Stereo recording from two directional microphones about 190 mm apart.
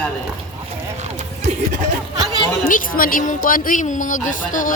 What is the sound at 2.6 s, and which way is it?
Speech, 45° left (ahead or behind).